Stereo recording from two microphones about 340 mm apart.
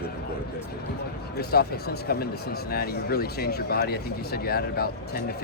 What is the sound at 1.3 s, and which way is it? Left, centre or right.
A man's voice, left.